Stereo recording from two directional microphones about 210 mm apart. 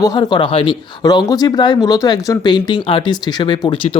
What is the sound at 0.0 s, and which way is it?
Speech, 20° left (ahead or behind).